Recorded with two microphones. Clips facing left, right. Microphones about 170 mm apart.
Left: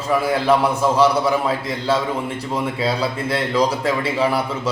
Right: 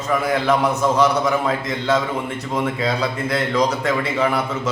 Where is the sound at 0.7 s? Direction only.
30° left (ahead or behind).